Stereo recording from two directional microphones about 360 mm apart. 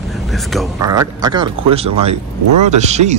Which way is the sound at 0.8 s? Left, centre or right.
Centre.